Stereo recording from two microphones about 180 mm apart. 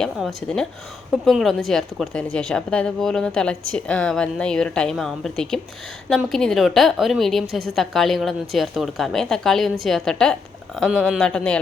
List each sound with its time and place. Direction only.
0.0 s speech: centre (ahead or behind)